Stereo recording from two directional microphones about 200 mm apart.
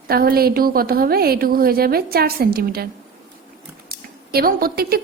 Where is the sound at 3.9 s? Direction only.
50° right (ahead or behind).